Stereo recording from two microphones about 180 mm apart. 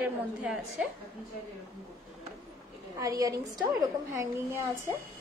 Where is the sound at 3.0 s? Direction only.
20° right (ahead or behind).